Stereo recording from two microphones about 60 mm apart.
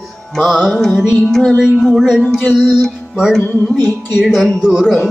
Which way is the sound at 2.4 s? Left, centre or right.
Centre.